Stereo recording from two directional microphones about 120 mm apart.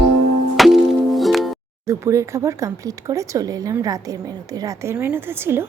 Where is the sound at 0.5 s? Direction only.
Centre (ahead or behind).